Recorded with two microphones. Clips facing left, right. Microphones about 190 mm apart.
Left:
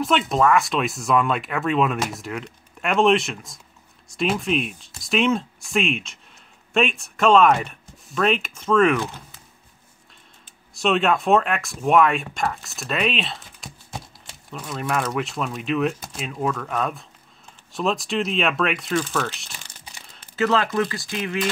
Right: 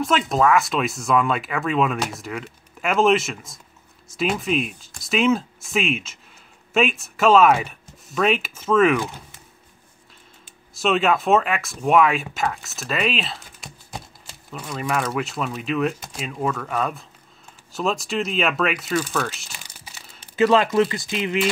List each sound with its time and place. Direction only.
0.0 s speech: centre (ahead or behind)
10.7 s speech: centre (ahead or behind)
20.3 s speech: 15° right (ahead or behind)